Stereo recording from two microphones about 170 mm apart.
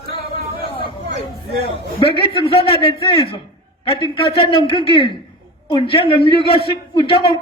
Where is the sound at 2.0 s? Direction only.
30° left (ahead or behind).